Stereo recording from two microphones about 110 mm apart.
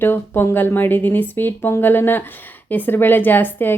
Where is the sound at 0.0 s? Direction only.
20° left (ahead or behind).